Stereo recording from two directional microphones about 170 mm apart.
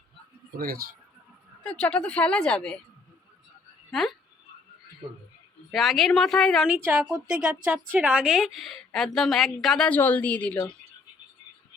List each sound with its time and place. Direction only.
0.5 s speech: 60° right (ahead or behind)
1.6 s a woman's voice: 5° left (ahead or behind)
4.0 s a woman's voice: centre (ahead or behind)
5.7 s a woman's voice: centre (ahead or behind)
6.7 s a woman's voice: 10° right (ahead or behind); by 10.6 s 10° left (ahead or behind)